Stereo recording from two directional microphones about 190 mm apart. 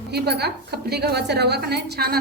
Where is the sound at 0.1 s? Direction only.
60° right (ahead or behind).